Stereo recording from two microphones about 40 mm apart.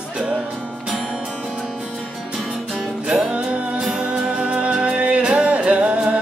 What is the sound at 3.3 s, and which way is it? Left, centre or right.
Music, right.